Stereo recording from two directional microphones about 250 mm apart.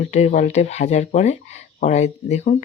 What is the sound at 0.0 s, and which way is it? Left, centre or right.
Speech, left.